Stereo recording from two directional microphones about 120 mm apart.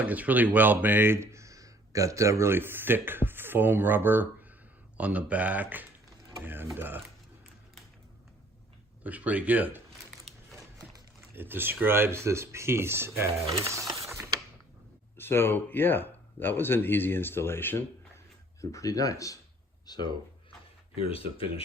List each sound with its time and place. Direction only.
0.0 s speech: 15° right (ahead or behind)
9.0 s speech: 10° right (ahead or behind)
11.3 s speech: 15° right (ahead or behind)
14.1 s mechanisms: 25° right (ahead or behind)
15.2 s speech: 20° left (ahead or behind)
19.8 s a sound: 35° left (ahead or behind)
21.0 s speech: 55° left (ahead or behind)